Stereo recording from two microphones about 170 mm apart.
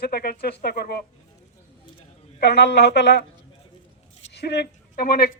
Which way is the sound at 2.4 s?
80° left.